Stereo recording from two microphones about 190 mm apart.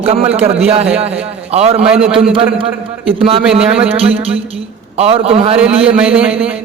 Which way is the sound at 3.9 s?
30° right (ahead or behind).